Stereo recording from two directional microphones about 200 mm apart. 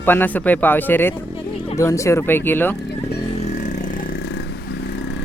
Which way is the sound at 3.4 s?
35° left (ahead or behind).